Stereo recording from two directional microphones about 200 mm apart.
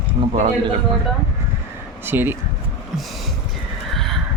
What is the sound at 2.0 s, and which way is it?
Speech, 10° right (ahead or behind).